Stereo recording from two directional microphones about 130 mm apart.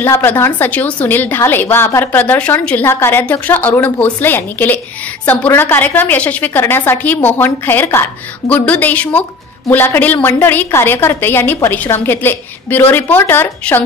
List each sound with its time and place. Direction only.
0.0 s a woman's voice: 15° left (ahead or behind)